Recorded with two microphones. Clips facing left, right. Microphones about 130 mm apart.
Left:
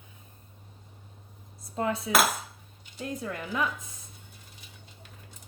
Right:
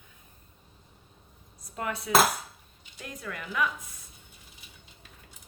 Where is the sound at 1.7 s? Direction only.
25° left (ahead or behind).